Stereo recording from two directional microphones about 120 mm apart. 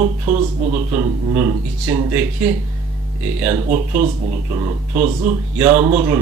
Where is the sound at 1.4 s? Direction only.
25° right (ahead or behind).